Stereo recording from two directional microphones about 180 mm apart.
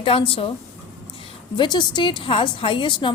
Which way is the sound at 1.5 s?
25° left (ahead or behind).